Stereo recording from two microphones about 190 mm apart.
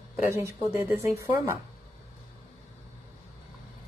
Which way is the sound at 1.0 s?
15° right (ahead or behind).